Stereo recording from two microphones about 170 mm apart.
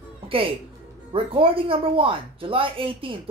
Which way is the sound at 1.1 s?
35° right (ahead or behind).